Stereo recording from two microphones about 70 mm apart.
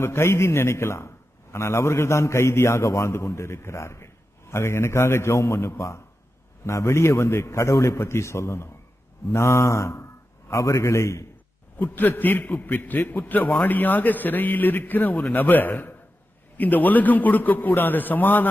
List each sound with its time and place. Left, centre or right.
0.0 s a man's voice: left
11.8 s a man's voice: left